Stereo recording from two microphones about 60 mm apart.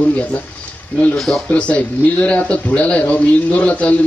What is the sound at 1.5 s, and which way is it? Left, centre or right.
A man's voice, left.